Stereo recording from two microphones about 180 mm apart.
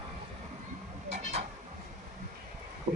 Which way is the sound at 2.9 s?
40° right (ahead or behind).